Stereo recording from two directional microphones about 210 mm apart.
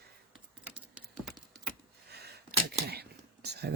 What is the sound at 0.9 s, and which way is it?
Clip-clop, centre (ahead or behind).